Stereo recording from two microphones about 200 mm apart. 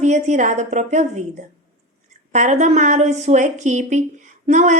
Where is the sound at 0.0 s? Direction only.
35° right (ahead or behind).